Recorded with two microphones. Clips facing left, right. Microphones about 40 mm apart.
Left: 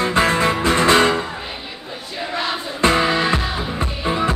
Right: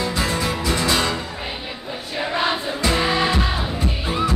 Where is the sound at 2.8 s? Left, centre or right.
Left.